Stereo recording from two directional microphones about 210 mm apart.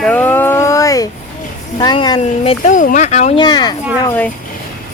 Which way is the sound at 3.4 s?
20° left (ahead or behind).